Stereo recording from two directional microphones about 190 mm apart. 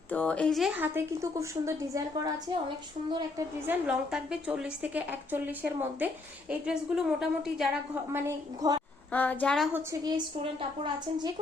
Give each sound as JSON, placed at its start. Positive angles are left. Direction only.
{"t": 0.1, "sound": "a woman's voice", "side_deg": 5}
{"t": 0.8, "sound": "a woman's voice", "side_deg": -15}
{"t": 3.7, "sound": "a woman's voice", "side_deg": -5}
{"t": 8.6, "sound": "a woman's voice", "side_deg": -20}
{"t": 9.1, "sound": "a woman's voice", "side_deg": 10}
{"t": 9.7, "sound": "a woman's voice", "side_deg": -20}